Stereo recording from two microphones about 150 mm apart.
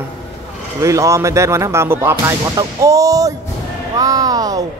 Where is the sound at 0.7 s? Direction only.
20° right (ahead or behind).